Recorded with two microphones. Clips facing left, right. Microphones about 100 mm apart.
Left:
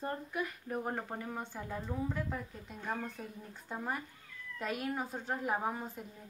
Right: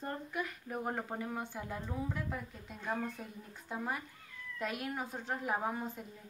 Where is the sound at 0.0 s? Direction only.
Centre (ahead or behind).